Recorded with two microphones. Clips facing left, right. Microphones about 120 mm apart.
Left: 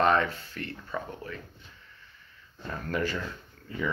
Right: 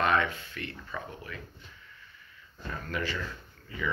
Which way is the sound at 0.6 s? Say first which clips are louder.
Left 6 dB; 35° left (ahead or behind).